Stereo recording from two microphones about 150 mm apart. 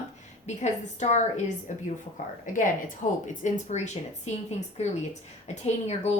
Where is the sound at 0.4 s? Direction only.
50° left (ahead or behind).